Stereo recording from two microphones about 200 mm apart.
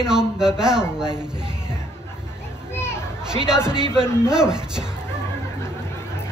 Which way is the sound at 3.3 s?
5° right (ahead or behind).